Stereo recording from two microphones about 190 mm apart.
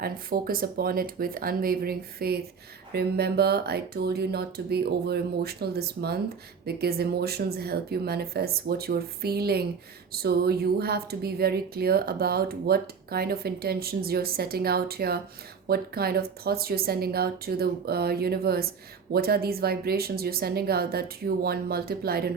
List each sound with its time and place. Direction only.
0.0 s speech: 50° right (ahead or behind)